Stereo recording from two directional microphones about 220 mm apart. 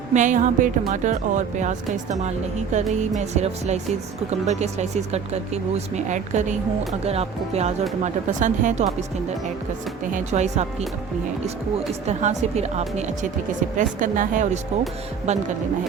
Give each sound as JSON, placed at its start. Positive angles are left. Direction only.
{"t": 0.1, "sound": "speech", "side_deg": -35}
{"t": 10.2, "sound": "speech", "side_deg": -30}
{"t": 12.0, "sound": "speech", "side_deg": -30}